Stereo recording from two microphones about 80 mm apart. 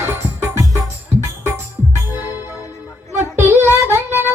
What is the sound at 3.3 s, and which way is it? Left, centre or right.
Child singing, right.